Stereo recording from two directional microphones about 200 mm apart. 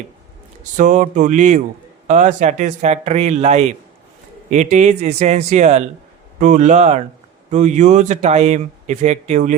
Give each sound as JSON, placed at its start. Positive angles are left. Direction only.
{"t": 0.8, "sound": "speech", "side_deg": -40}